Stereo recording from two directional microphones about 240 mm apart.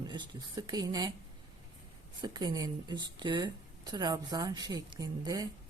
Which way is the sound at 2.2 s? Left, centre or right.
Centre.